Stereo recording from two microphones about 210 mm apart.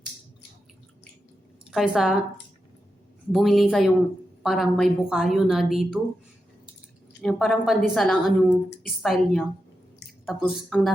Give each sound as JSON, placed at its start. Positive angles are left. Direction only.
{"t": 1.7, "sound": "a woman's voice", "side_deg": 0}
{"t": 3.3, "sound": "a woman's voice", "side_deg": 0}
{"t": 7.2, "sound": "a woman's voice", "side_deg": 0}